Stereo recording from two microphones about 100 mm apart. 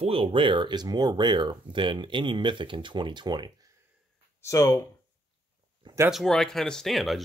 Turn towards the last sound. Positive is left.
turn(degrees=0)  # may be behind; listen again after turning